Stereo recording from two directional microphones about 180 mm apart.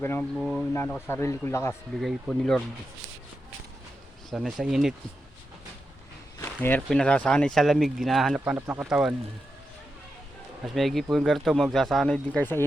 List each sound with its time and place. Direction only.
0.0 s speech: 15° left (ahead or behind)
0.3 s speech: centre (ahead or behind)
1.0 s speech: 15° left (ahead or behind)
2.0 s speech: centre (ahead or behind)
4.3 s speech: centre (ahead or behind)
6.4 s speech: 10° left (ahead or behind); by 9.1 s 5° right (ahead or behind)
10.8 s speech: centre (ahead or behind)